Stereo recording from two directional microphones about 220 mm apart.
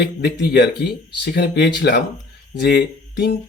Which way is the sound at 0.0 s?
50° left (ahead or behind).